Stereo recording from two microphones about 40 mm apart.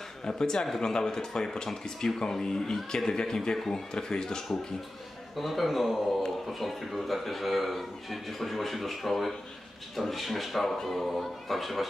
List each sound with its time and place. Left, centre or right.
0.2 s speech: centre
5.4 s a man's voice: centre